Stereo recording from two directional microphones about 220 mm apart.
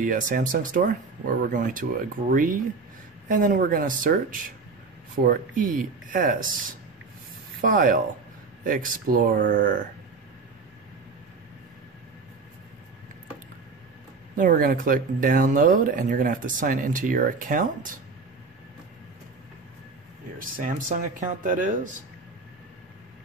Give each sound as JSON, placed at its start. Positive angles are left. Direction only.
{"t": 0.0, "sound": "speech", "side_deg": -35}
{"t": 7.6, "sound": "speech", "side_deg": -40}
{"t": 14.3, "sound": "speech", "side_deg": -40}
{"t": 20.3, "sound": "speech", "side_deg": -35}